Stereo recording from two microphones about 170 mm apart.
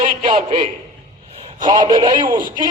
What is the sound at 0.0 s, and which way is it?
A man's voice, 30° right (ahead or behind).